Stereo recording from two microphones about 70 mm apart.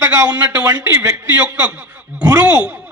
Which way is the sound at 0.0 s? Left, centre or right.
Right.